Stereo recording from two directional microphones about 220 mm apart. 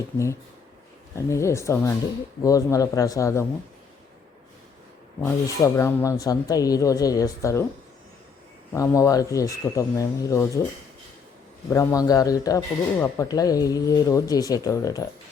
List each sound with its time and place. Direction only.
1.1 s a man's voice: 15° left (ahead or behind)
5.2 s a man's voice: 10° left (ahead or behind)
8.7 s a man's voice: 15° left (ahead or behind)
11.7 s a man's voice: 15° left (ahead or behind)